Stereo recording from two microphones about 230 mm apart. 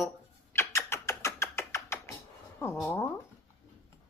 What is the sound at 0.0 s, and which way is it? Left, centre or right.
Rodents, centre.